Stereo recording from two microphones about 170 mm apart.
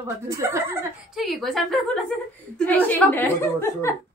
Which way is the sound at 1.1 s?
Centre (ahead or behind).